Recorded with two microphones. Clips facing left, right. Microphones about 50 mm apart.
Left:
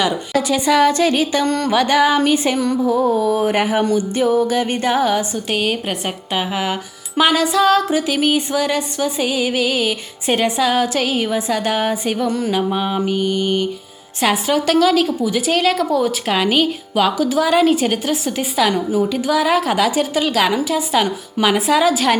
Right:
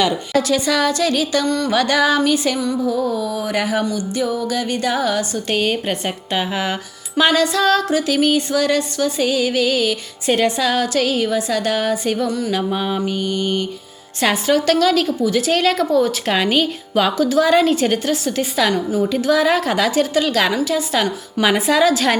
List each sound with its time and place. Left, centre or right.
0.0 s a woman's voice: centre
1.5 s music: left
1.7 s a sound: centre
2.2 s a woman's voice: left
5.5 s a woman's voice: centre
7.2 s a sound: centre
14.2 s a woman's voice: centre
17.2 s a sound: centre
18.7 s a woman's voice: left
19.0 s a woman's voice: centre
20.7 s a sound: centre
21.4 s a woman's voice: centre